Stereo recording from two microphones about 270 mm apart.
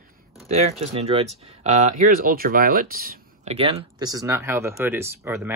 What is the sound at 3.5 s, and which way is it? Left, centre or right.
Speech, right.